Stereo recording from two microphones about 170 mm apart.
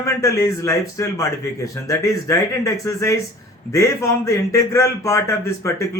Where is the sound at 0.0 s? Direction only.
15° left (ahead or behind).